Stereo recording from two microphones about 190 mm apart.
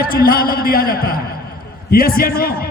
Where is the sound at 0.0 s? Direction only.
50° left (ahead or behind).